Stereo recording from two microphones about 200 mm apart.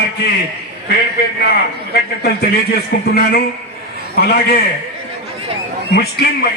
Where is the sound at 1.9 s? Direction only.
50° left (ahead or behind).